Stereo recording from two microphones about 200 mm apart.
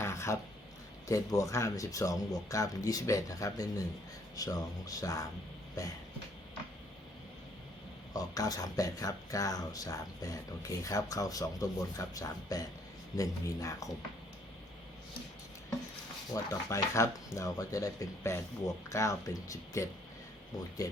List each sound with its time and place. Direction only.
0.0 s a sound: 15° left (ahead or behind)
1.0 s speech: 15° left (ahead or behind)
8.1 s speech: 20° left (ahead or behind)
16.3 s speech: 15° left (ahead or behind)